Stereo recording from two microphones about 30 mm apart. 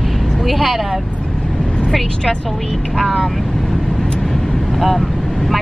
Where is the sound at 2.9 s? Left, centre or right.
Centre.